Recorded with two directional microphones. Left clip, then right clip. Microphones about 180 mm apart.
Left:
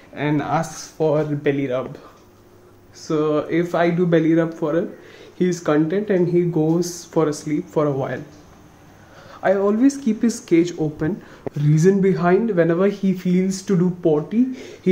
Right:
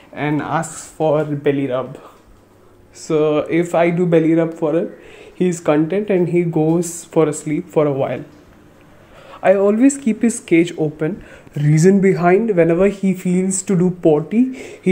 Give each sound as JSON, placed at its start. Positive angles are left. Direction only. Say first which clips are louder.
{"t": 0.1, "sound": "speech", "louder": "right 1 dB", "side_deg": -10}
{"t": 3.1, "sound": "speech", "louder": "right 4 dB", "side_deg": -5}
{"t": 4.3, "sound": "speech", "louder": "right 3 dB", "side_deg": 5}
{"t": 5.5, "sound": "speech", "louder": "right 3 dB", "side_deg": -5}
{"t": 9.3, "sound": "speech", "louder": "right 5 dB", "side_deg": -15}
{"t": 11.6, "sound": "speech", "louder": "right 3 dB", "side_deg": -30}
{"t": 12.4, "sound": "speech", "louder": "right 4 dB", "side_deg": -5}
{"t": 13.7, "sound": "speech", "louder": "right 5 dB", "side_deg": -15}